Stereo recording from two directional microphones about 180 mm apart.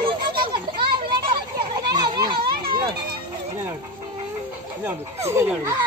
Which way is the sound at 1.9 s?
25° right (ahead or behind).